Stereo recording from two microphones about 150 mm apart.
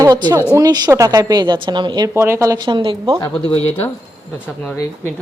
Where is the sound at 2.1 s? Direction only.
15° right (ahead or behind); by 3.1 s 35° right (ahead or behind).